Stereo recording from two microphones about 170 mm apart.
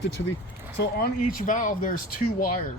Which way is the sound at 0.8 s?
65° left (ahead or behind).